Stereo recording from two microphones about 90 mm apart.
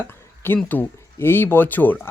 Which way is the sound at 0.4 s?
20° left (ahead or behind).